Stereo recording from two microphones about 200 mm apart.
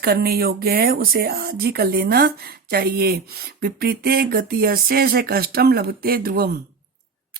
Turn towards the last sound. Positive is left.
turn(degrees=-50)  # may be behind; listen again after turning